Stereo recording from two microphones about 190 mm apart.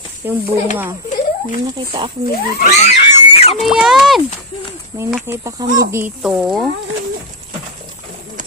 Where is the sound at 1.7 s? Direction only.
25° right (ahead or behind).